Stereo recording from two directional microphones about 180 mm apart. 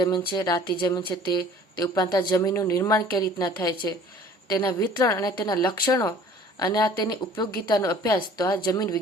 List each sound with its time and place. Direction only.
0.0 s a woman's voice: 25° left (ahead or behind)